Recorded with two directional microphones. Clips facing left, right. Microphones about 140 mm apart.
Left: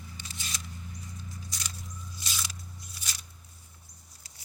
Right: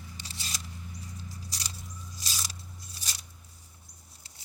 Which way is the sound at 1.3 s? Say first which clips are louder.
Even; 35° right (ahead or behind).